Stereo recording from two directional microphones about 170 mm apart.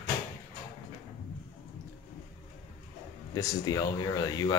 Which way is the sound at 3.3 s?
20° left (ahead or behind).